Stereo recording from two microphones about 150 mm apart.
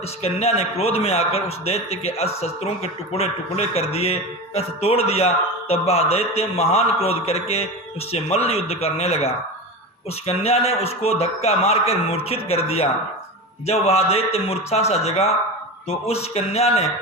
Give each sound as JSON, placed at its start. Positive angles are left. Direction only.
{"t": 0.2, "sound": "a man's voice", "side_deg": 45}